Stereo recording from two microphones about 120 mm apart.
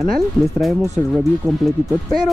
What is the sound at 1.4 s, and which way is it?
Speech, 25° right (ahead or behind).